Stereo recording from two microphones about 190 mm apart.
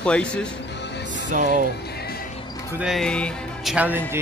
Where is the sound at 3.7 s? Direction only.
10° right (ahead or behind).